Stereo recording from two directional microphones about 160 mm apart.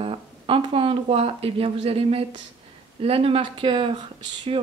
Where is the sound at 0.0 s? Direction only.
35° right (ahead or behind).